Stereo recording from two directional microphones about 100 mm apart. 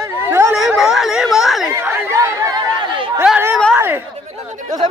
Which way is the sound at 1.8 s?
25° right (ahead or behind).